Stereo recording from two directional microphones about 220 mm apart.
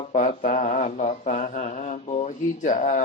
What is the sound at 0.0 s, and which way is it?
Mantra, 30° left (ahead or behind).